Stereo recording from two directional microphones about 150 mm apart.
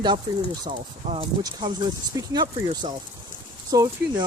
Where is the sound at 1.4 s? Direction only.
30° right (ahead or behind).